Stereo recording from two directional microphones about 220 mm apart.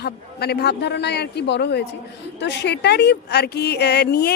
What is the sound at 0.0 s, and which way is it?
A woman's voice, 45° left (ahead or behind).